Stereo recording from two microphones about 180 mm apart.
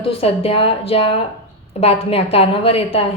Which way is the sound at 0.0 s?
30° left (ahead or behind).